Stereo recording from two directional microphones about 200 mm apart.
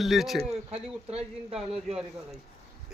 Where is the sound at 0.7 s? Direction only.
30° right (ahead or behind).